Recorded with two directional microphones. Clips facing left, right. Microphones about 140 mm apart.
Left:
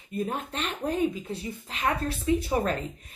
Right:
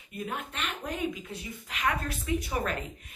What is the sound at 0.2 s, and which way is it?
A woman's voice, 35° left (ahead or behind).